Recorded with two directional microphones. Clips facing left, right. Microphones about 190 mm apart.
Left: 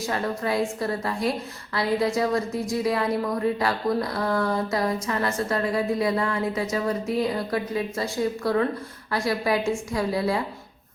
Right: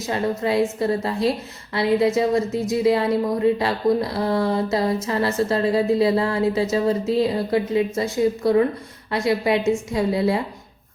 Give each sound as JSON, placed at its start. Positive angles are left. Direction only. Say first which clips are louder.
{"t": 0.0, "sound": "a woman's voice", "louder": "right 4 dB", "side_deg": -25}